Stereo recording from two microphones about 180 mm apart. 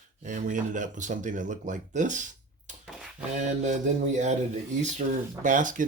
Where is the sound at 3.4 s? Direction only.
40° right (ahead or behind).